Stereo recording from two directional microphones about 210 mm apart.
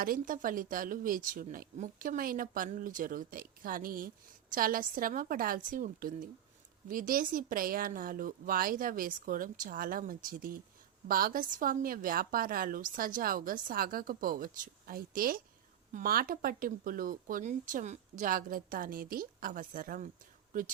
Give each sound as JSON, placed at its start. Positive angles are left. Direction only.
{"t": 0.0, "sound": "a woman's voice", "side_deg": -40}